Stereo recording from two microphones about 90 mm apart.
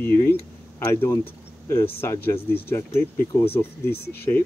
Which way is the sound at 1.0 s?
30° left (ahead or behind).